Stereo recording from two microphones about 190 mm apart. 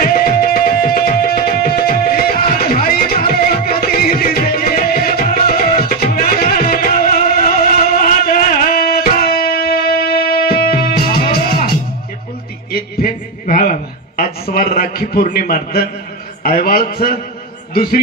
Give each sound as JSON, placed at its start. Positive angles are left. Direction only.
{"t": 0.0, "sound": "music", "side_deg": 50}
{"t": 12.7, "sound": "a sound", "side_deg": 50}
{"t": 16.4, "sound": "a man's voice", "side_deg": 50}